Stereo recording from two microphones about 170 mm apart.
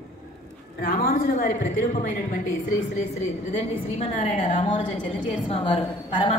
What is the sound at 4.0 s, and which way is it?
Speech, 45° left (ahead or behind).